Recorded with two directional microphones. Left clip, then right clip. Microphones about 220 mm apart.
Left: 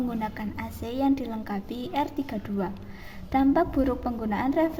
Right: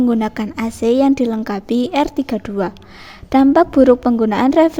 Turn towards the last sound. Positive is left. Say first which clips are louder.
# right 12 dB
turn(degrees=-45)  # may be behind; listen again after turning